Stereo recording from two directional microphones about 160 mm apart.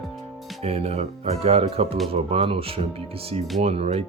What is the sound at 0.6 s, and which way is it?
Speech, 40° right (ahead or behind).